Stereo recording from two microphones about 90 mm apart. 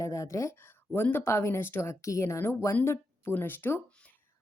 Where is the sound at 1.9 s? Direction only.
35° left (ahead or behind).